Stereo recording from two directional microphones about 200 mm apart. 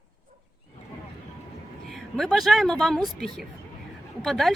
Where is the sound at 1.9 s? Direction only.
Centre (ahead or behind).